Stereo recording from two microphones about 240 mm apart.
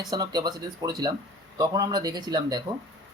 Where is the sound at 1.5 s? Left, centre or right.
Centre.